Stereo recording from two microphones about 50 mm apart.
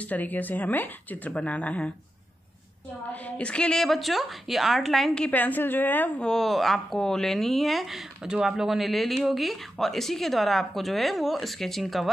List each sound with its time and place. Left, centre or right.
0.0 s speech: left
1.3 s a woman's voice: left
3.1 s a woman's voice: left
3.7 s speech: centre
5.3 s speech: left
6.3 s speech: centre